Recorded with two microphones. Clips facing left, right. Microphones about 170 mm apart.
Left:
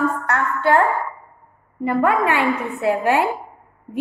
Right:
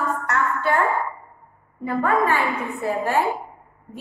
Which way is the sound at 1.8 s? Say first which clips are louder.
Left 3 dB; 70° left (ahead or behind).